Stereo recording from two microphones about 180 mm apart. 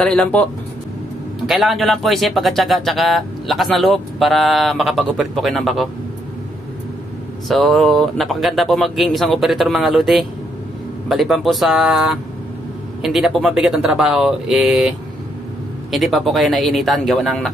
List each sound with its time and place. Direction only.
0.0 s speech: 5° left (ahead or behind)
1.5 s speech: centre (ahead or behind)
7.4 s speech: centre (ahead or behind)